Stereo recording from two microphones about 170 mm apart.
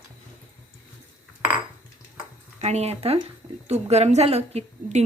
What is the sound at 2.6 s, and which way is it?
Speech, 40° right (ahead or behind).